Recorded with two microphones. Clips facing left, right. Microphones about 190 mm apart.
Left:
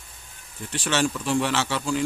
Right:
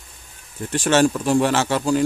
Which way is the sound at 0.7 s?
45° right (ahead or behind).